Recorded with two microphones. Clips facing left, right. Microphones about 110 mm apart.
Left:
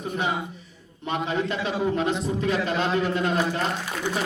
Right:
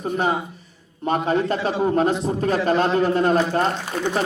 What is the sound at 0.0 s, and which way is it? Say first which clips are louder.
A man's voice: right 5 dB; 45° right (ahead or behind).